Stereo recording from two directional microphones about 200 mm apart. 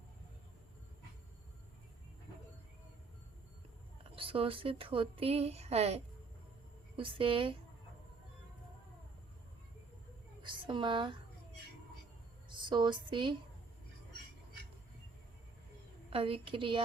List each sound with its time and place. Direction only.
4.1 s speech: 25° right (ahead or behind)
10.4 s a woman's voice: 25° right (ahead or behind)
12.5 s speech: 20° right (ahead or behind)
16.0 s speech: 25° right (ahead or behind)